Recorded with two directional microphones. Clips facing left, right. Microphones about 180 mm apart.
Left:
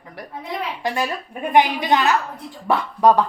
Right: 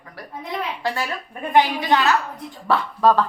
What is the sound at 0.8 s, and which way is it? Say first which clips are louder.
Speech: left 3 dB; 20° left (ahead or behind).